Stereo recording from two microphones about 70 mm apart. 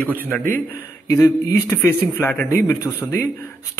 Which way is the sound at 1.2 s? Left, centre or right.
Left.